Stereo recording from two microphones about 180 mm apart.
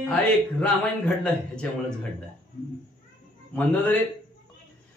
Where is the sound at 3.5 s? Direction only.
10° left (ahead or behind).